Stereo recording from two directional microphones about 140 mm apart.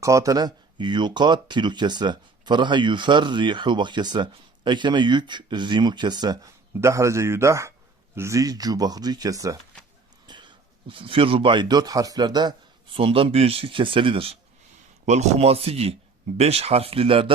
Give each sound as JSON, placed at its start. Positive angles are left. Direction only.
{"t": 0.0, "sound": "a man's voice", "side_deg": -25}
{"t": 15.0, "sound": "speech", "side_deg": -55}